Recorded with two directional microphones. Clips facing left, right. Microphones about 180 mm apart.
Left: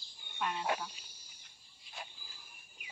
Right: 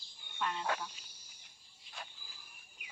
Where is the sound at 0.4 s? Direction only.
15° left (ahead or behind).